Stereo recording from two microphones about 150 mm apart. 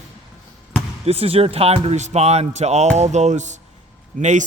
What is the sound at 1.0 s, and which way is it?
A man's voice, 40° right (ahead or behind).